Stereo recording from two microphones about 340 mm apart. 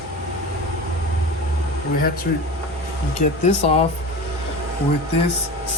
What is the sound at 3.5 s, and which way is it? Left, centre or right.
Speech, centre.